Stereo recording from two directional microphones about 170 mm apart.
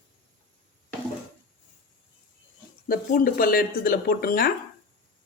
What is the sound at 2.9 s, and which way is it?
Speech, 60° left (ahead or behind).